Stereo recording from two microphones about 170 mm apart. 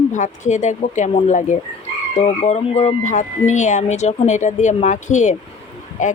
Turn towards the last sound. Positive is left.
turn(degrees=50)  # may be behind; listen again after turning